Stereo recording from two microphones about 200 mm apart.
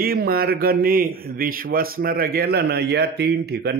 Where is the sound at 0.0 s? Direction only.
50° right (ahead or behind).